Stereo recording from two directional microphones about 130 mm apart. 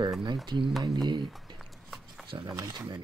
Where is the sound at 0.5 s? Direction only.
Centre (ahead or behind).